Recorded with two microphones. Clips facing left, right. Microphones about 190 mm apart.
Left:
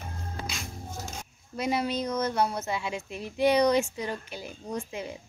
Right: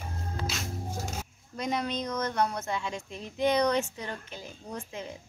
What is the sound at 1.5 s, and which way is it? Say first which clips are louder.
Speech: left 3 dB; 10° left (ahead or behind).